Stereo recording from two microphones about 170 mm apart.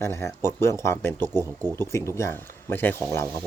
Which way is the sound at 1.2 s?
20° right (ahead or behind).